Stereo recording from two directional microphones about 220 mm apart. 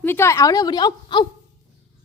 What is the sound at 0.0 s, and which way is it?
A woman's voice, 10° left (ahead or behind).